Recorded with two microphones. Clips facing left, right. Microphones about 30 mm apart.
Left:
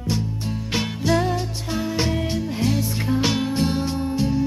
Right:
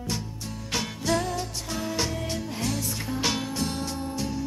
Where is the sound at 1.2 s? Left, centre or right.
Left.